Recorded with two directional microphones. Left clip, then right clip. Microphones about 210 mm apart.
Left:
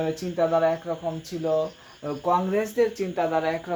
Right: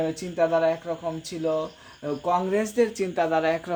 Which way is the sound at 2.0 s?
35° right (ahead or behind).